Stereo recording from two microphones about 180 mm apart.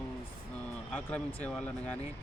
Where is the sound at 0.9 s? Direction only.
5° left (ahead or behind).